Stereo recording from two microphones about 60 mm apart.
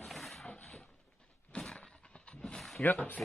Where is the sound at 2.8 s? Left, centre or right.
Left.